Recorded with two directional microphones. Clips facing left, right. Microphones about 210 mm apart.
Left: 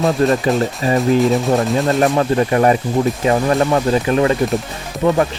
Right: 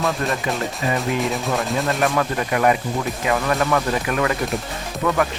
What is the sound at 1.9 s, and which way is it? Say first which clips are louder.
Speech: left 6 dB; 35° left (ahead or behind).